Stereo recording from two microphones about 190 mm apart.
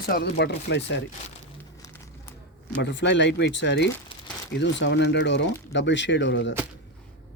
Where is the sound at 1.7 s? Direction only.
15° left (ahead or behind).